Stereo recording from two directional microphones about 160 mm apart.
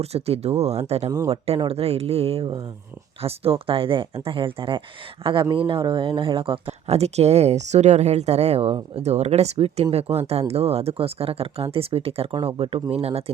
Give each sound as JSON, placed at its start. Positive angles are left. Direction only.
{"t": 0.0, "sound": "speech", "side_deg": -40}